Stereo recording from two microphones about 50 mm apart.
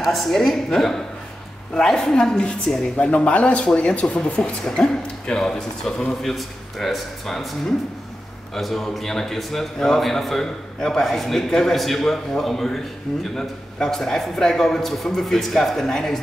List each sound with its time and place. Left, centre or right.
0.0 s a man's voice: centre
3.1 s a man's voice: left; by 7.4 s centre
8.5 s a man's voice: centre